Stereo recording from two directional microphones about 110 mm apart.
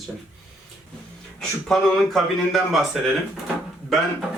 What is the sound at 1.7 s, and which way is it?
Speech, centre (ahead or behind).